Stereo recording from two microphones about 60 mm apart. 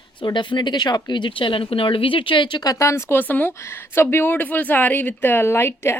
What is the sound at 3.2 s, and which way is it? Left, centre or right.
Speech, left.